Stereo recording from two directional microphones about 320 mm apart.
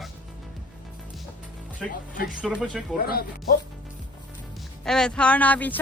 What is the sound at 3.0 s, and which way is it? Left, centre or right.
Speech, left.